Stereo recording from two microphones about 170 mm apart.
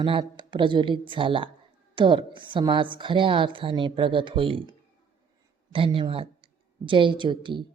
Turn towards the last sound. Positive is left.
turn(degrees=-30)  # may be behind; listen again after turning